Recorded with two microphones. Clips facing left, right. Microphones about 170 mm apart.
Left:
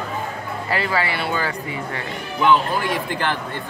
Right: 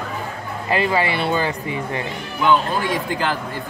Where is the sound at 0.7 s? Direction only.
20° right (ahead or behind).